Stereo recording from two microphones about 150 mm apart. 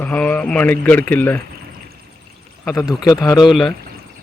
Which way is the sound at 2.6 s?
25° left (ahead or behind).